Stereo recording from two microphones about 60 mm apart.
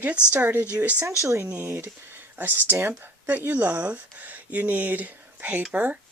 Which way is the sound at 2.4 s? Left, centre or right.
Right.